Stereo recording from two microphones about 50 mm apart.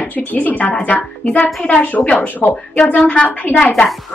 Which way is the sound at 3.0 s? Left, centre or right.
Centre.